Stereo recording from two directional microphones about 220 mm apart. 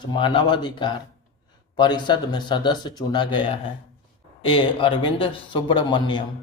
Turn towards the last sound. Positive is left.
turn(degrees=20)  # may be behind; listen again after turning